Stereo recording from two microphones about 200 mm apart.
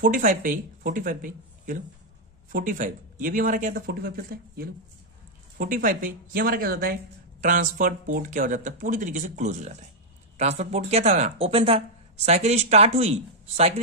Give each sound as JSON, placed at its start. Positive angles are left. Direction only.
{"t": 0.0, "sound": "speech", "side_deg": -40}